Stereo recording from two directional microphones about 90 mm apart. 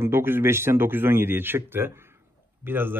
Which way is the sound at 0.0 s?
25° right (ahead or behind).